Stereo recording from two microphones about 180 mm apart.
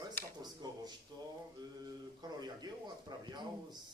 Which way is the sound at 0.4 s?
20° right (ahead or behind).